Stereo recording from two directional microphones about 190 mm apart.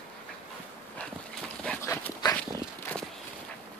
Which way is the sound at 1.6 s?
10° left (ahead or behind).